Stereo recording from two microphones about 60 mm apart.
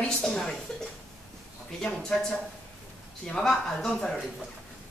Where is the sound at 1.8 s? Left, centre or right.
Centre.